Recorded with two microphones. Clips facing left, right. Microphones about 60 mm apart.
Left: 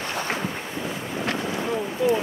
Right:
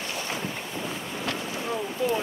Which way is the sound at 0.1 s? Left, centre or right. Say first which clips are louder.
Left 6 dB; left.